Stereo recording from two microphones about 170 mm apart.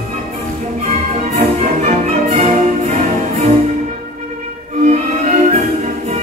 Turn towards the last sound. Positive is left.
turn(degrees=-40)  # may be behind; listen again after turning